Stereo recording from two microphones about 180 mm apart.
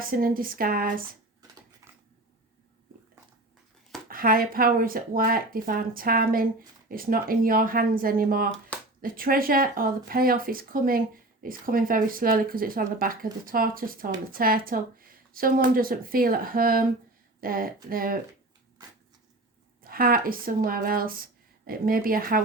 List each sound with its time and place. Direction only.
0.0 s speech: 50° right (ahead or behind)
4.1 s speech: 55° right (ahead or behind)
19.8 s speech: 55° right (ahead or behind)